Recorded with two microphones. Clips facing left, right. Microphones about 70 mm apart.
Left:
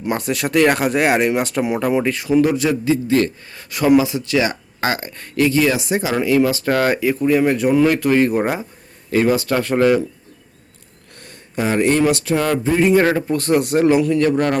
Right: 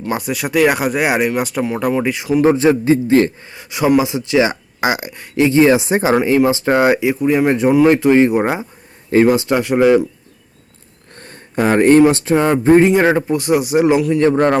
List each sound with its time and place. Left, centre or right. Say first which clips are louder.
0.1 s speech: even; centre
2.0 s speech: right 1 dB; centre
2.4 s a man's voice: right 9 dB; right
3.5 s speech: left 1 dB; centre
5.5 s speech: right 7 dB; right
11.1 s a sound: right 4 dB; right
12.0 s speech: right 4 dB; right; by 13.8 s centre
14.2 s speech: right 4 dB; right